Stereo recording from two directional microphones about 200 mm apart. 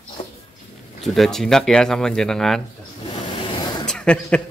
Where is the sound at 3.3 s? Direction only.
25° left (ahead or behind).